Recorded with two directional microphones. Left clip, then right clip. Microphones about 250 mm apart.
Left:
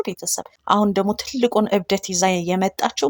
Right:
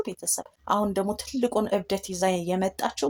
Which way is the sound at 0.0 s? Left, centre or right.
Left.